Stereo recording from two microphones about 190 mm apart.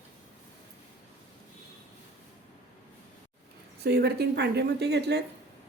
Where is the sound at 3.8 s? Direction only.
60° right (ahead or behind).